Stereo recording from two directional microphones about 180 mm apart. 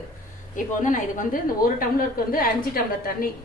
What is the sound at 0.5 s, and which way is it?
A woman's voice, 45° left (ahead or behind).